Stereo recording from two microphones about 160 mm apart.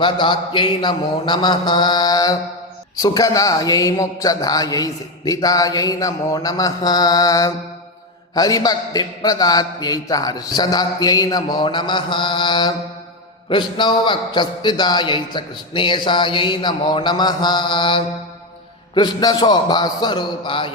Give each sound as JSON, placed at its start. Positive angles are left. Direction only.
{"t": 0.0, "sound": "a man's voice", "side_deg": 30}